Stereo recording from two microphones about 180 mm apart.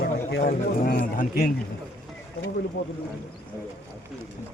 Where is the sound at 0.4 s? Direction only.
55° left (ahead or behind).